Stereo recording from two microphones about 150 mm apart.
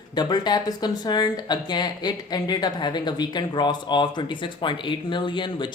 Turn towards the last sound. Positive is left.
turn(degrees=30)  # may be behind; listen again after turning